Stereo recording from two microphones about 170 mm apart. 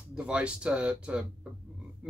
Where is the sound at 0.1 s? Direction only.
5° right (ahead or behind).